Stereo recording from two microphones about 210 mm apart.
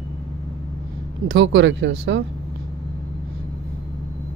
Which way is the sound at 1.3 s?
60° right (ahead or behind).